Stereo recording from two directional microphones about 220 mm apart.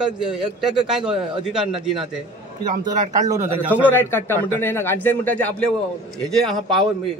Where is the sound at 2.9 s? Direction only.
35° right (ahead or behind).